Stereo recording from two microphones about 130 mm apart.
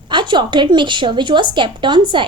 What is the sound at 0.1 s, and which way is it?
A woman's voice, 35° right (ahead or behind).